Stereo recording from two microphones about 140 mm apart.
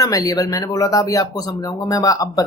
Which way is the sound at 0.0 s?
25° left (ahead or behind).